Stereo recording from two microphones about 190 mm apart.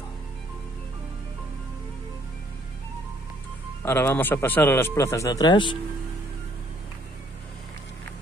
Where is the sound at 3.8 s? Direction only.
10° left (ahead or behind).